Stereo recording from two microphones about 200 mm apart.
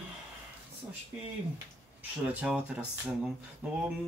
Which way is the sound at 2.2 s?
5° right (ahead or behind).